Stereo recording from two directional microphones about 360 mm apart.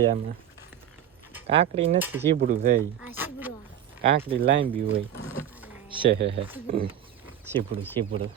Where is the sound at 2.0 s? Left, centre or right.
Centre.